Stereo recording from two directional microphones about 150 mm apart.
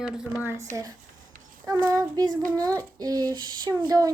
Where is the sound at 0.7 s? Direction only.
25° right (ahead or behind).